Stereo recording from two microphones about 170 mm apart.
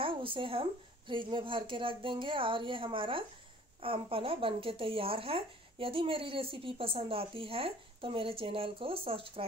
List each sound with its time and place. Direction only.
0.0 s speech: 30° right (ahead or behind)